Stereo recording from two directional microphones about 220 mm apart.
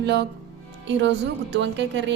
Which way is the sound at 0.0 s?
50° right (ahead or behind).